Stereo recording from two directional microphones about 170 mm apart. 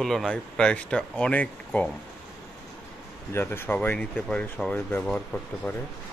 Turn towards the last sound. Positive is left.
turn(degrees=5)  # may be behind; listen again after turning